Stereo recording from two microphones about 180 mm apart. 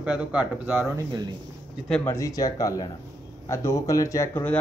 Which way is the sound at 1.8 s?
5° left (ahead or behind).